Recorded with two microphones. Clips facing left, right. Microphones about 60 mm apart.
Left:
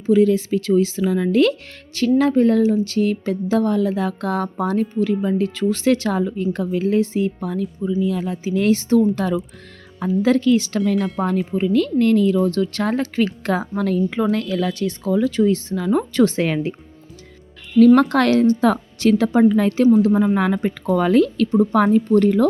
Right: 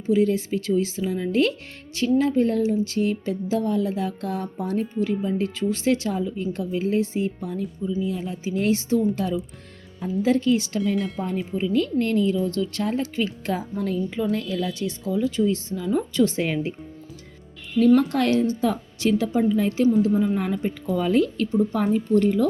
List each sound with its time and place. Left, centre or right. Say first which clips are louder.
0.0 s speech: left 5 dB; left
2.7 s speech: left 4 dB; left
5.6 s a woman's voice: left 5 dB; left
10.0 s speech: left 4 dB; left
17.7 s a woman's voice: left 6 dB; left